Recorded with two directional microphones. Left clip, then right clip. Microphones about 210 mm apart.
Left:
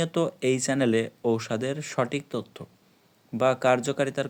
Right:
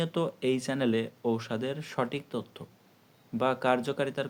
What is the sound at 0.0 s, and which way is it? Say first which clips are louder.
Speech: left 4 dB; 35° left (ahead or behind).